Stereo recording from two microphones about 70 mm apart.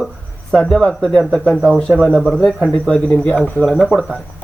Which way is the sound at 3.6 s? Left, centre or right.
Centre.